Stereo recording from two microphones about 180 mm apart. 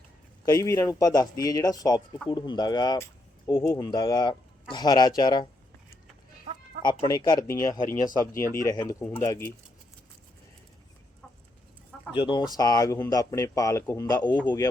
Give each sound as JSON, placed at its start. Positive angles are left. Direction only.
{"t": 0.4, "sound": "speech", "side_deg": 20}
{"t": 6.8, "sound": "speech", "side_deg": 25}
{"t": 12.1, "sound": "speech", "side_deg": 25}